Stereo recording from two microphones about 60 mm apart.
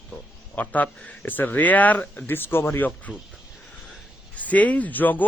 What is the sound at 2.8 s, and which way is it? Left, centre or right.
Speech, left.